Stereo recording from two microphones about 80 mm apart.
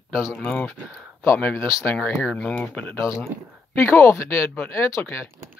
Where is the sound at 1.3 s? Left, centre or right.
Left.